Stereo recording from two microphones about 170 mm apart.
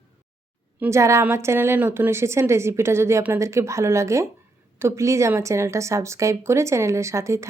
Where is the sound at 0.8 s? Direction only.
15° right (ahead or behind).